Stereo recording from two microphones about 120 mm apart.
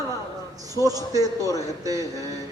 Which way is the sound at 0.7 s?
30° right (ahead or behind).